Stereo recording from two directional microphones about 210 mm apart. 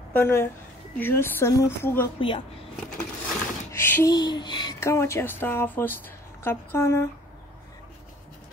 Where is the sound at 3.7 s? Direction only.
10° left (ahead or behind).